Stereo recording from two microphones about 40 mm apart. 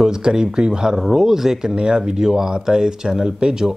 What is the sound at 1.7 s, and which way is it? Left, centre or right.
A man's voice, right.